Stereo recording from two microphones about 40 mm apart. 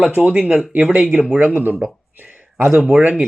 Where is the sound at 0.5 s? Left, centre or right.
Right.